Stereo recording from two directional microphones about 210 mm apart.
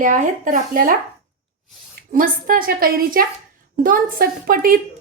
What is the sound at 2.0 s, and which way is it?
A woman's voice, 40° right (ahead or behind).